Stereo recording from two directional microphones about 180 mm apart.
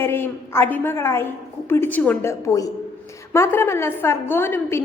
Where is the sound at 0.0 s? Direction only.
15° left (ahead or behind).